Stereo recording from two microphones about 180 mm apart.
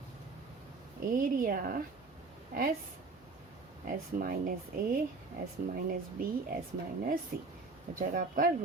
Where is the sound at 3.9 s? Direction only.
50° right (ahead or behind).